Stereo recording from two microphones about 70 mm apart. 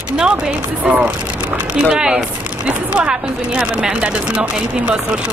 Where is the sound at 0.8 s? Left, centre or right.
Centre.